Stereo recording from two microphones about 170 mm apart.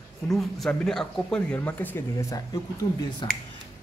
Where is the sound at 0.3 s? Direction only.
Centre (ahead or behind); by 3.3 s 20° left (ahead or behind).